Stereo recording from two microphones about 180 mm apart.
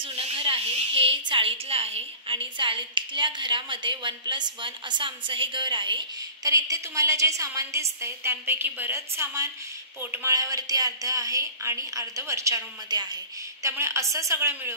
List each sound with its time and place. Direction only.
0.0 s a woman's voice: 35° right (ahead or behind); by 14.7 s 15° right (ahead or behind)